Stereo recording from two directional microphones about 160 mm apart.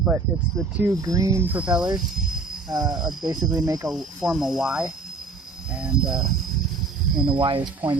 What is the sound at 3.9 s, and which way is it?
Speech, 5° right (ahead or behind).